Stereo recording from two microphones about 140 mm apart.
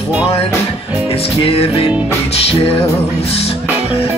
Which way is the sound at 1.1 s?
45° left (ahead or behind).